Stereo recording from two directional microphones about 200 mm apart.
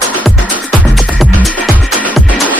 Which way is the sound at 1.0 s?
5° right (ahead or behind).